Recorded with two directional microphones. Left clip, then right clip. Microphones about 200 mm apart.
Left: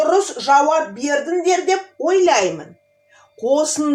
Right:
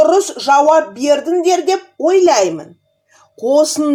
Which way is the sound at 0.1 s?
40° right (ahead or behind).